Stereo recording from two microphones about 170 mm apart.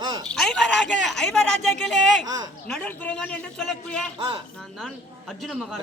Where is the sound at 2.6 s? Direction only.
10° left (ahead or behind).